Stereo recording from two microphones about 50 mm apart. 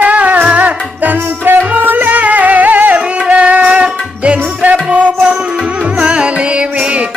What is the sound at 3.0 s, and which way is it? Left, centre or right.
Music, right.